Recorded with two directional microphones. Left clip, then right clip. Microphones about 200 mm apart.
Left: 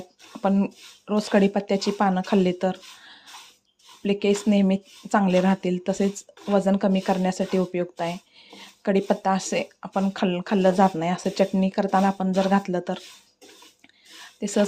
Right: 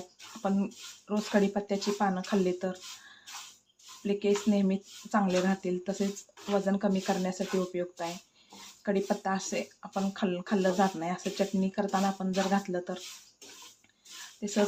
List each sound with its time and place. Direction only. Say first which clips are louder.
0.4 s speech: left 8 dB; 40° left (ahead or behind)
4.0 s speech: left 6 dB; 40° left (ahead or behind)
14.4 s speech: left 7 dB; 40° left (ahead or behind)